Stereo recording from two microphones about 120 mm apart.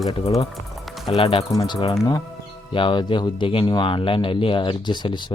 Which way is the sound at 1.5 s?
40° left (ahead or behind).